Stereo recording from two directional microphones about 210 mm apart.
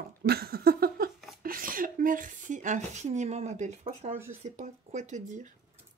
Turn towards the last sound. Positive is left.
turn(degrees=-35)  # may be behind; listen again after turning